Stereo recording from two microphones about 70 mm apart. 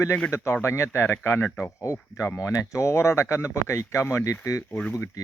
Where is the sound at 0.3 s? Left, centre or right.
Left.